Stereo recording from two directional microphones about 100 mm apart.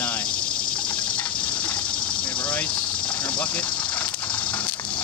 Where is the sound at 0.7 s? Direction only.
15° left (ahead or behind).